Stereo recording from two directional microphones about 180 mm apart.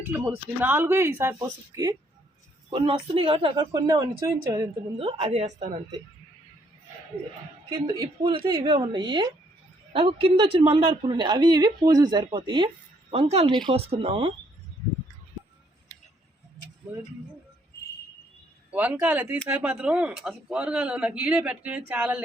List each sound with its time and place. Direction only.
0.1 s a woman's voice: 10° right (ahead or behind)
4.9 s speech: 35° right (ahead or behind)
7.7 s a woman's voice: 20° right (ahead or behind)
13.5 s speech: 25° right (ahead or behind)
18.7 s speech: 10° right (ahead or behind)